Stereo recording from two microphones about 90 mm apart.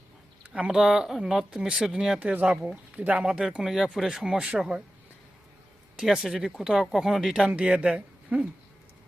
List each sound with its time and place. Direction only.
0.4 s speech: 15° right (ahead or behind)
6.0 s speech: 5° right (ahead or behind)